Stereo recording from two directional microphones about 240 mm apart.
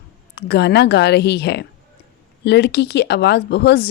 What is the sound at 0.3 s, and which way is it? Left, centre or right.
Speech, left.